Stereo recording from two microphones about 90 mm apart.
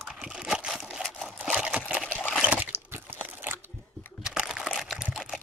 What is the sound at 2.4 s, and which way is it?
Crunch, 15° right (ahead or behind).